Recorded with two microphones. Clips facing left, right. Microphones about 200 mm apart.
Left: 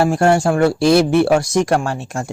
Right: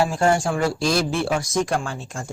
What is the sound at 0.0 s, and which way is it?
Speech, 70° left (ahead or behind).